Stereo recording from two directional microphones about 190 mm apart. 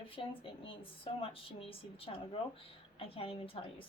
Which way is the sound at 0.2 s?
30° left (ahead or behind).